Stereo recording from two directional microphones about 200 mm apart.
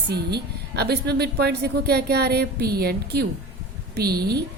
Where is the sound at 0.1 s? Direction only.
55° right (ahead or behind).